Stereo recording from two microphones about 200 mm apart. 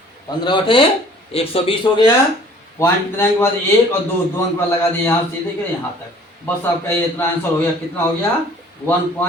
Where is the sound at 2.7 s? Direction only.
10° left (ahead or behind).